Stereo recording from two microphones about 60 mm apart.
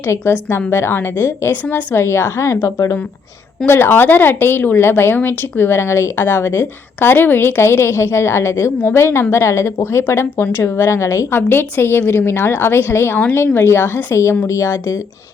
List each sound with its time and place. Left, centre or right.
0.1 s a woman's voice: left
2.0 s a woman's voice: left
3.7 s speech: left
6.5 s a woman's voice: left
7.1 s a woman's voice: left
11.3 s a woman's voice: left
14.4 s speech: left